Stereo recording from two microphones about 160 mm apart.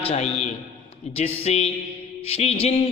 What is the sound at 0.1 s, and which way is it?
A man's voice, 40° left (ahead or behind).